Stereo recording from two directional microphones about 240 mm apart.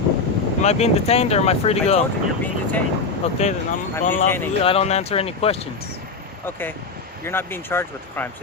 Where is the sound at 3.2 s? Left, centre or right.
Left.